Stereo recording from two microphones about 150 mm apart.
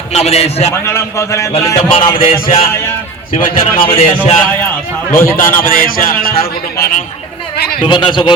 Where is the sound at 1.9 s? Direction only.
35° left (ahead or behind).